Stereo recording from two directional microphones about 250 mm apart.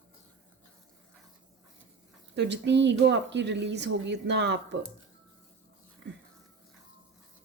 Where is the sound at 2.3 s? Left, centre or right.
Right.